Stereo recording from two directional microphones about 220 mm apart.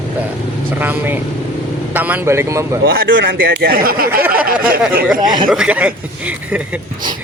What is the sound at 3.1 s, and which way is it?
Speech, 60° right (ahead or behind).